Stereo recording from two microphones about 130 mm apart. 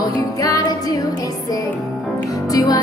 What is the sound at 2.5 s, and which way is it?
Music, 30° left (ahead or behind).